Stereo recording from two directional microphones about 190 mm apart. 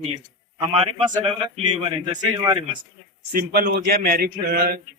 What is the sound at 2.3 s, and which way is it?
Speech, 25° right (ahead or behind).